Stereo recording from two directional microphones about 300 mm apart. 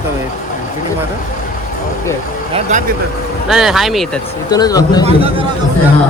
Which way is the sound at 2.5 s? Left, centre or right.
Right.